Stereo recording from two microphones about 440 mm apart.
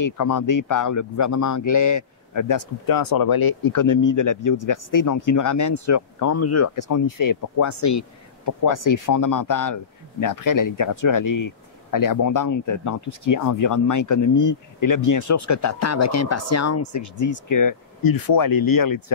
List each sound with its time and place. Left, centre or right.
0.0 s speech: left